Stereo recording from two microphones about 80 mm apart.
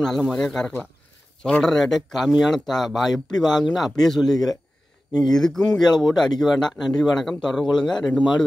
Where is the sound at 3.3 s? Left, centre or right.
Left.